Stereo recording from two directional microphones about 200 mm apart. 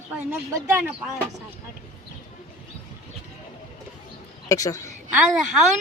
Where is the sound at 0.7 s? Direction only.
5° right (ahead or behind).